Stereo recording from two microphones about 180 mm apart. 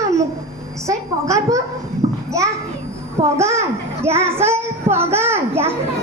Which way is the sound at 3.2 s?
15° right (ahead or behind).